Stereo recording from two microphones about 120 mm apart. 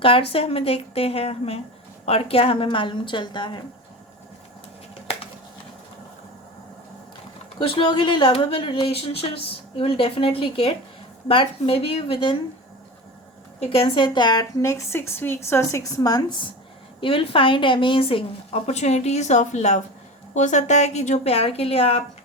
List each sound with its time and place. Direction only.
0.0 s a woman's voice: 50° left (ahead or behind)
7.6 s a woman's voice: 45° left (ahead or behind)
13.6 s a woman's voice: 45° left (ahead or behind)
17.0 s a woman's voice: 45° left (ahead or behind)
18.6 s a woman's voice: 65° left (ahead or behind)